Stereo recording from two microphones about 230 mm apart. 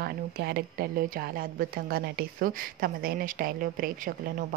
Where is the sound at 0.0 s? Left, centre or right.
Right.